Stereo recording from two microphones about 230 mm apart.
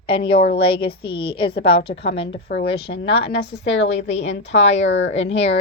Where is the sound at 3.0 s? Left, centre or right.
Left.